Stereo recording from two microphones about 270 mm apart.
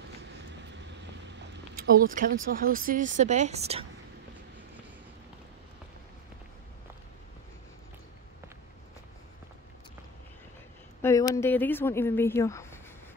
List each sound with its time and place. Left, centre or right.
1.4 s a sound: right
2.4 s a woman's voice: right
11.0 s speech: centre